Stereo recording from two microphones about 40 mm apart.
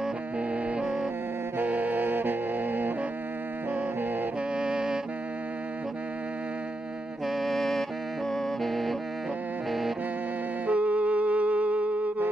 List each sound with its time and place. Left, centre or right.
0.7 s music: centre
1.6 s saxophone: right
4.6 s saxophone: centre
7.2 s music: centre
10.7 s music: right